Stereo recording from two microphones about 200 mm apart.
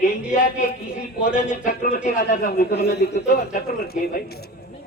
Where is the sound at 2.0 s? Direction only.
40° left (ahead or behind).